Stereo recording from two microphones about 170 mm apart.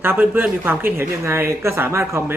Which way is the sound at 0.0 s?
10° right (ahead or behind).